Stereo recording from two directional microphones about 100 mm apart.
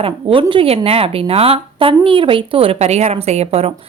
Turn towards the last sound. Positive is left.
turn(degrees=-90)